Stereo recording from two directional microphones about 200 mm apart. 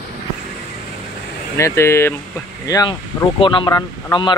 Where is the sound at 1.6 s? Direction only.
15° left (ahead or behind).